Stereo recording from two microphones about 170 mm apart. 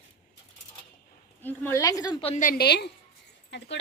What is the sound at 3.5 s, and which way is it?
Speech, 90° left.